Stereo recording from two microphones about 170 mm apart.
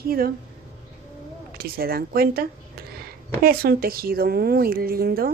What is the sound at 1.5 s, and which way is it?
Speech, 60° right (ahead or behind).